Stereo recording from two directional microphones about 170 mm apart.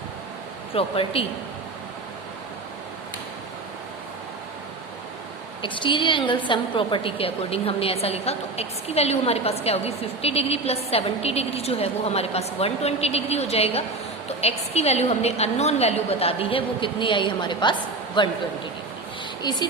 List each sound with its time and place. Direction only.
0.7 s a woman's voice: 35° left (ahead or behind)
5.6 s a woman's voice: 30° left (ahead or behind)
19.4 s speech: 25° left (ahead or behind)